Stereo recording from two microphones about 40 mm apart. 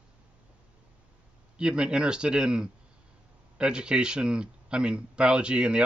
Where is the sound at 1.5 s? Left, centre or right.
Right.